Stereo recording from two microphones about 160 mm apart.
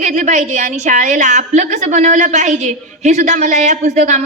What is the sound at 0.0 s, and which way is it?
A woman's voice, 50° right (ahead or behind).